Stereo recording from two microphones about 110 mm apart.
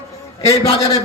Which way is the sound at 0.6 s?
65° left (ahead or behind).